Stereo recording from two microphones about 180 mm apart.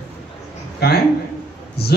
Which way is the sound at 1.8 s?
60° left (ahead or behind).